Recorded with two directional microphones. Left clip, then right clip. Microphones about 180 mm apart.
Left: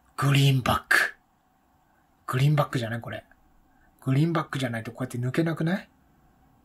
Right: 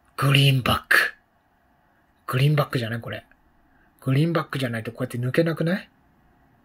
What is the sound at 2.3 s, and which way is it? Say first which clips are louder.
Speech: right 2 dB; 10° right (ahead or behind).